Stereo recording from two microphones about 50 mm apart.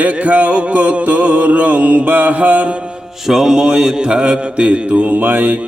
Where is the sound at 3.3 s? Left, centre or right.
Centre; by 5.6 s right.